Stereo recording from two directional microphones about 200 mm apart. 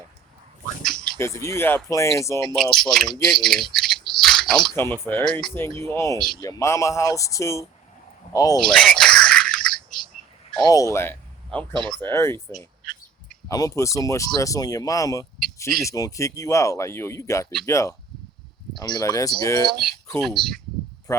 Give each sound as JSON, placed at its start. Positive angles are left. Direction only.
{"t": 0.8, "sound": "dog", "side_deg": 0}
{"t": 1.2, "sound": "speech", "side_deg": 15}
{"t": 2.6, "sound": "speech", "side_deg": 0}
{"t": 6.1, "sound": "speech", "side_deg": 0}
{"t": 6.4, "sound": "speech", "side_deg": 15}
{"t": 8.5, "sound": "a sound", "side_deg": 0}
{"t": 10.6, "sound": "speech", "side_deg": 15}
{"t": 13.5, "sound": "speech", "side_deg": 15}
{"t": 20.2, "sound": "speech", "side_deg": 0}
{"t": 21.1, "sound": "speech", "side_deg": 15}